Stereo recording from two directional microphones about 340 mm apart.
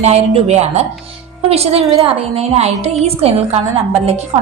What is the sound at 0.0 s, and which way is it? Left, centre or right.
A woman's voice, centre.